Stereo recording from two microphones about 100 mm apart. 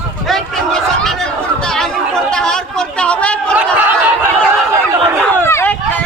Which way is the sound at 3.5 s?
15° right (ahead or behind).